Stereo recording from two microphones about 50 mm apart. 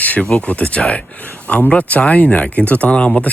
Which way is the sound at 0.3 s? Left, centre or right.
Left.